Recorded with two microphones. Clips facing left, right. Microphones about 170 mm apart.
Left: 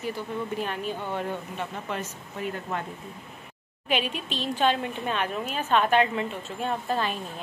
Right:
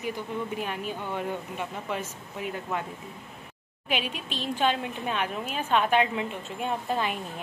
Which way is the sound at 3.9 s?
10° right (ahead or behind).